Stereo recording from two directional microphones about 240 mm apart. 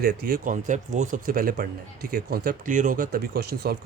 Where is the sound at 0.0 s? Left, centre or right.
Right.